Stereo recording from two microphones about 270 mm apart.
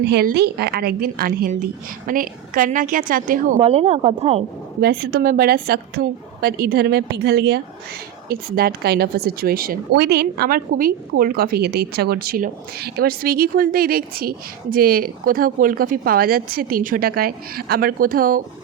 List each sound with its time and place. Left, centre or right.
0.0 s a woman's voice: right
4.8 s speech: right